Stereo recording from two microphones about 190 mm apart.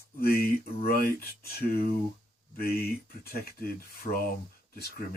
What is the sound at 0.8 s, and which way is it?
Speech, 50° left (ahead or behind).